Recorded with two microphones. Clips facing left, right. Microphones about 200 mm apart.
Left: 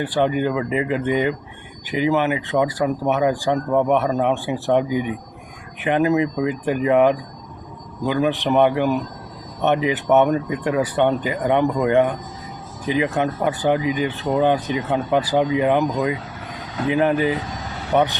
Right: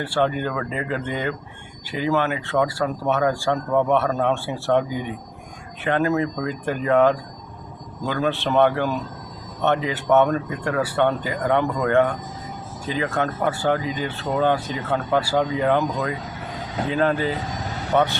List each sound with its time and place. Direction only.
0.0 s speech: 15° left (ahead or behind)